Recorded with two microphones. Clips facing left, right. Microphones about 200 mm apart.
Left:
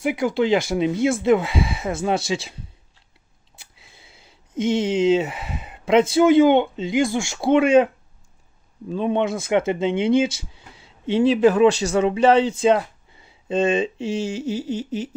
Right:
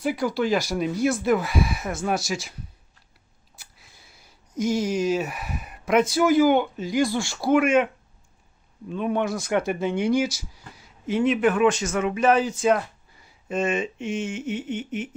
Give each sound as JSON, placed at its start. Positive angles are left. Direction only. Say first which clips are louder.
{"t": 0.0, "sound": "speech", "louder": "left 3 dB", "side_deg": 20}
{"t": 3.8, "sound": "speech", "louder": "left 3 dB", "side_deg": 25}
{"t": 8.9, "sound": "speech", "louder": "left 3 dB", "side_deg": 25}
{"t": 13.2, "sound": "mantra", "louder": "left 5 dB", "side_deg": 30}